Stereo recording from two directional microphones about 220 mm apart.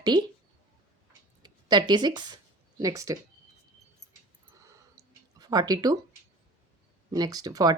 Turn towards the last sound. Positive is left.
turn(degrees=-15)  # may be behind; listen again after turning